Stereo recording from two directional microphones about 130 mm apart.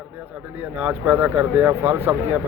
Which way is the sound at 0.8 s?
15° right (ahead or behind).